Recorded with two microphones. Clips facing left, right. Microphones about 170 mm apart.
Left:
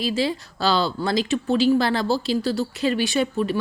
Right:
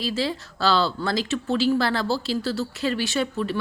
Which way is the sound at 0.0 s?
15° left (ahead or behind).